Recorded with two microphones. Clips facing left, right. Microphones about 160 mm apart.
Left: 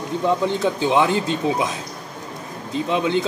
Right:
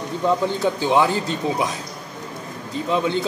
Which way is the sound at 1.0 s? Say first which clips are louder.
Left 1 dB; 20° left (ahead or behind).